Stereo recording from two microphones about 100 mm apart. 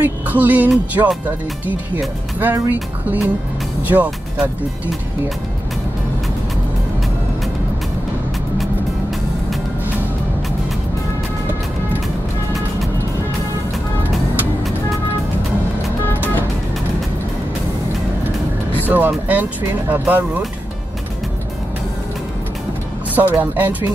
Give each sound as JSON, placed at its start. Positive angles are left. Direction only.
{"t": 0.0, "sound": "speech", "side_deg": -15}
{"t": 2.4, "sound": "speech", "side_deg": -20}
{"t": 18.9, "sound": "speech", "side_deg": -15}
{"t": 23.1, "sound": "speech", "side_deg": -15}